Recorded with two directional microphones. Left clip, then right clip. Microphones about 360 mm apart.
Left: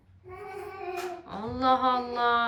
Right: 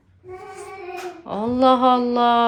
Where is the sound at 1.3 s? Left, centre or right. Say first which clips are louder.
Right 9 dB; centre.